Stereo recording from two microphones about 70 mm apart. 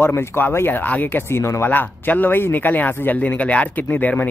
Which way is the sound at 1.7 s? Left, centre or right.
Left.